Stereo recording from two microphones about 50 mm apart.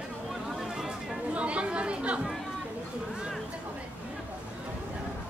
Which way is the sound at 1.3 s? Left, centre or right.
Right.